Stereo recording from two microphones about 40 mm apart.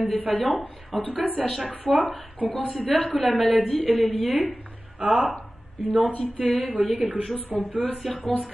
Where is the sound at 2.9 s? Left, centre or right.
Left.